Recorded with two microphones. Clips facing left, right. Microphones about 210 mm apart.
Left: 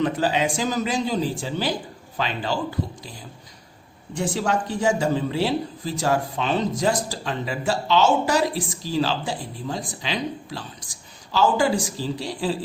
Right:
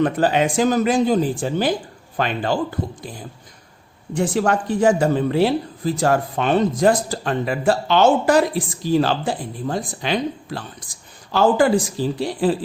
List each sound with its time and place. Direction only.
0.0 s speech: 55° right (ahead or behind)